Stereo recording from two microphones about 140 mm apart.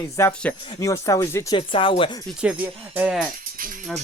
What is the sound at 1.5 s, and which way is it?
Speech, 40° left (ahead or behind).